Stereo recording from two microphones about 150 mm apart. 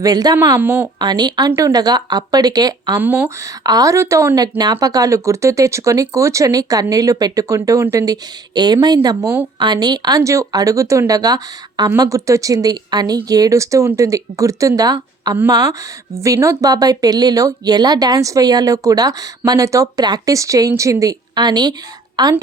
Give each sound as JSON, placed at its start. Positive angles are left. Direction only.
{"t": 0.0, "sound": "speech", "side_deg": -25}
{"t": 0.6, "sound": "speech", "side_deg": -15}
{"t": 0.9, "sound": "speech", "side_deg": -30}
{"t": 3.0, "sound": "speech", "side_deg": -15}
{"t": 3.6, "sound": "a woman's voice", "side_deg": -25}